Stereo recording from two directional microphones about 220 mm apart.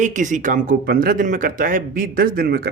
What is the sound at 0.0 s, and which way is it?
Speech, 35° right (ahead or behind).